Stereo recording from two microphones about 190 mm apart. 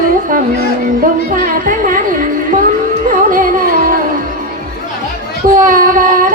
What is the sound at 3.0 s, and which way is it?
Carnatic music, 45° right (ahead or behind).